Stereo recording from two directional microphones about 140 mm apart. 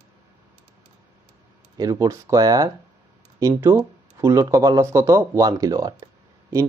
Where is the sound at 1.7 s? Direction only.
25° right (ahead or behind).